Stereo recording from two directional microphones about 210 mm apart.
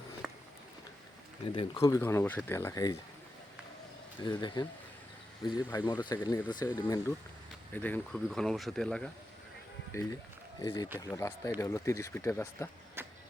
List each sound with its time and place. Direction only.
0.2 s a sound: 5° right (ahead or behind)
1.5 s speech: 20° left (ahead or behind)
4.2 s speech: 20° left (ahead or behind)
5.7 s speech: 20° left (ahead or behind)
7.7 s speech: 10° left (ahead or behind)
13.0 s a sound: 10° right (ahead or behind)